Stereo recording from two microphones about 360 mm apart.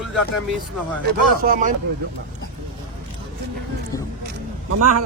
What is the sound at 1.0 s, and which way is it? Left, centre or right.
Speech, right.